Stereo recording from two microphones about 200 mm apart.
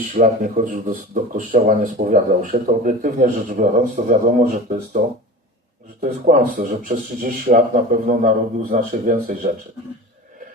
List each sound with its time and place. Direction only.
0.1 s speech: 40° right (ahead or behind)